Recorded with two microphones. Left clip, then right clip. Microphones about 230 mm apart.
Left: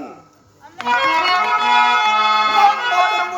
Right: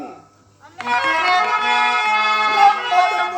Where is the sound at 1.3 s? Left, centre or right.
Right.